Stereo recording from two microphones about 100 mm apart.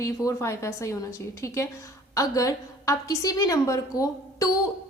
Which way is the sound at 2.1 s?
35° left (ahead or behind).